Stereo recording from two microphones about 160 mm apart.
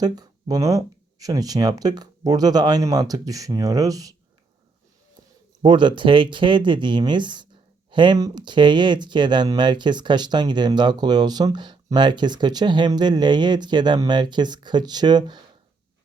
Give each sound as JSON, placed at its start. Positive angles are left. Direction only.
{"t": 0.0, "sound": "speech", "side_deg": -25}
{"t": 5.6, "sound": "speech", "side_deg": -30}